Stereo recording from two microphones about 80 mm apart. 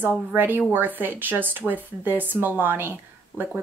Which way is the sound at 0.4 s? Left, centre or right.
Right.